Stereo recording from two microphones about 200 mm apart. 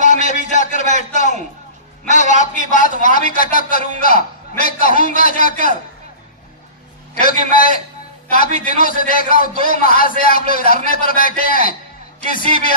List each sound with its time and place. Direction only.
0.0 s a sound: 40° left (ahead or behind)
4.0 s a man's voice: 45° left (ahead or behind)
7.2 s a man's voice: 45° left (ahead or behind)
8.7 s a man's voice: 45° left (ahead or behind)